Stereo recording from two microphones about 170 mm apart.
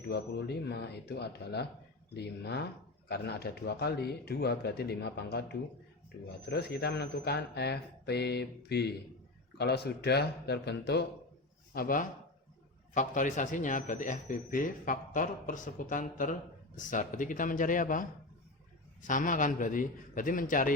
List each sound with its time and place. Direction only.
0.1 s speech: 75° left (ahead or behind)
11.7 s speech: 60° left (ahead or behind)
12.9 s speech: 50° left (ahead or behind)
19.0 s speech: 50° left (ahead or behind)